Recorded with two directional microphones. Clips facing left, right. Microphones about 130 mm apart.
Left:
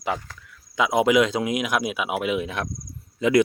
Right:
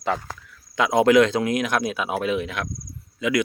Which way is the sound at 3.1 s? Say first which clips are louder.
Left 4 dB; 30° left (ahead or behind).